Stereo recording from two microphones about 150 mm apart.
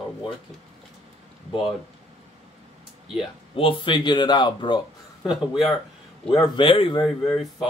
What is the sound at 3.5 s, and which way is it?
Speech, 35° left (ahead or behind).